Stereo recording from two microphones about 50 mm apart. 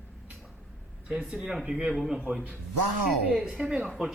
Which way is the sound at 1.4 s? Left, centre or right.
Centre.